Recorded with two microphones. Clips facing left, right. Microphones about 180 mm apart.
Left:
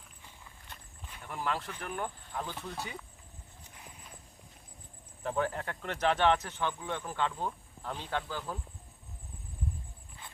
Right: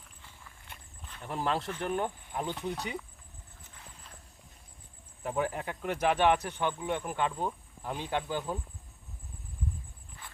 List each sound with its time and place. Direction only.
1.2 s speech: 25° right (ahead or behind)
5.2 s speech: 10° right (ahead or behind)